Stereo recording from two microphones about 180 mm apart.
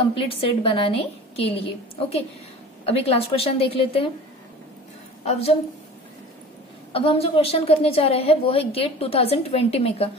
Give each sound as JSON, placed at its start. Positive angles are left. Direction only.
{"t": 0.0, "sound": "a woman's voice", "side_deg": 30}
{"t": 5.2, "sound": "a woman's voice", "side_deg": 35}
{"t": 6.9, "sound": "a woman's voice", "side_deg": 30}